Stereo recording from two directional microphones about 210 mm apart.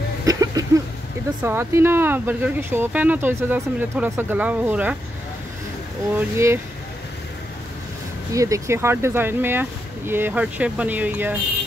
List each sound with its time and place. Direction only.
0.2 s a sound: 15° right (ahead or behind)
1.4 s speech: 10° right (ahead or behind)
6.1 s speech: 10° right (ahead or behind)
8.3 s speech: 15° right (ahead or behind)